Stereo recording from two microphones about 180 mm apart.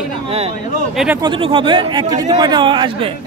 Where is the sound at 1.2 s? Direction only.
30° right (ahead or behind).